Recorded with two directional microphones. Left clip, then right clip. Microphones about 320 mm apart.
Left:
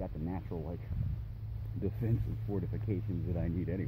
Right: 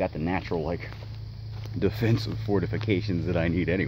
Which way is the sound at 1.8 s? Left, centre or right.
Centre.